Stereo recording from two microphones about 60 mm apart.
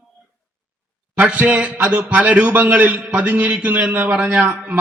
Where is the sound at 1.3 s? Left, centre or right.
Right.